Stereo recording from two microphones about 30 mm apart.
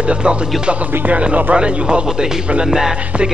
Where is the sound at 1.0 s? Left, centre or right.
Right.